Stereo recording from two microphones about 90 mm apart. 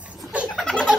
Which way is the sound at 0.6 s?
5° left (ahead or behind).